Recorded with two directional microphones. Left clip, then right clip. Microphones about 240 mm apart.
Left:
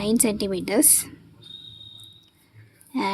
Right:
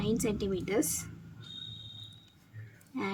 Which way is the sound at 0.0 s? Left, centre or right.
Left.